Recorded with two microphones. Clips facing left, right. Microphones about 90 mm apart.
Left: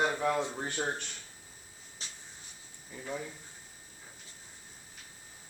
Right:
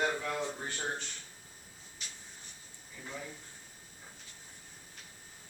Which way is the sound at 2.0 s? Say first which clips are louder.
Left 1 dB; 30° left (ahead or behind).